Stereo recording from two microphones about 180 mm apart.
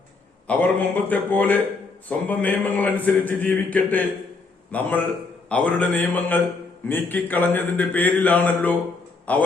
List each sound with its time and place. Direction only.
0.4 s a man's voice: 10° left (ahead or behind)